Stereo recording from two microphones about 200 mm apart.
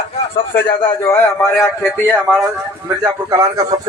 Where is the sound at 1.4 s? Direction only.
Centre (ahead or behind).